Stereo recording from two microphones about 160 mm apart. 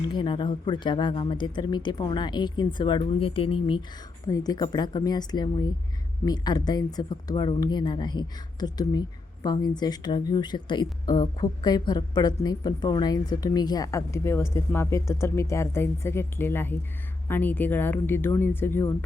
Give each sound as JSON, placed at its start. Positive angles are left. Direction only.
{"t": 0.1, "sound": "speech", "side_deg": 30}